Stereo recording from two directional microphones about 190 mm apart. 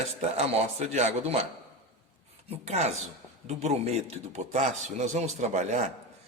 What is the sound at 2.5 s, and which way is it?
A man's voice, 35° right (ahead or behind).